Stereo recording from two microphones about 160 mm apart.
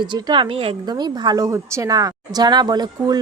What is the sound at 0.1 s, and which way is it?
Speech, 30° right (ahead or behind).